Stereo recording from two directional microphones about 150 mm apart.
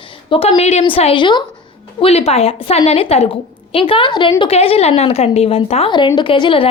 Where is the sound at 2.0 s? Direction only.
40° left (ahead or behind).